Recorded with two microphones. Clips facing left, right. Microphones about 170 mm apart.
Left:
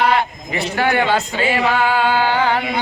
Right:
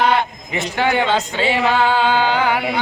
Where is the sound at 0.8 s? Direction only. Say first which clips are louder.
Even; 20° right (ahead or behind).